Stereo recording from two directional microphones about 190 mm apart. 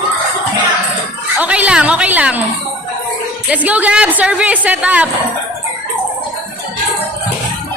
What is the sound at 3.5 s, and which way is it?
Speech, 10° right (ahead or behind).